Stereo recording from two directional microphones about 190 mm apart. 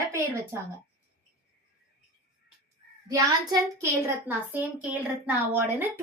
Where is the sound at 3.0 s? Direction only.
20° right (ahead or behind).